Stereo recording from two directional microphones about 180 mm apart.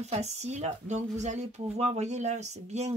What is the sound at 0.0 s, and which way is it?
Speech, 35° right (ahead or behind).